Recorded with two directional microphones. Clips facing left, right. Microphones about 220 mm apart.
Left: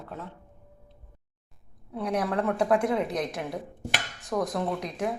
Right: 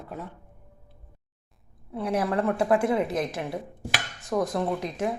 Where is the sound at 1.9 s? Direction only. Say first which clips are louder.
Right 2 dB; 5° right (ahead or behind).